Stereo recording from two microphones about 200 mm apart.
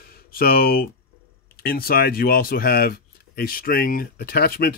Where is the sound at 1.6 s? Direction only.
50° left (ahead or behind).